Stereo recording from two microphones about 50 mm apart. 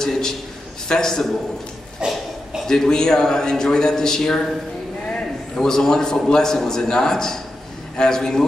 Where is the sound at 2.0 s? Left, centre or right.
Centre.